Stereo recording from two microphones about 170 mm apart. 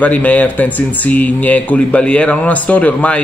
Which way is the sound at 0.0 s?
10° left (ahead or behind).